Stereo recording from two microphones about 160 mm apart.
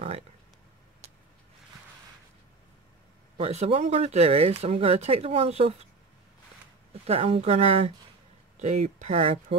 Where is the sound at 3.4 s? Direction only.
40° right (ahead or behind).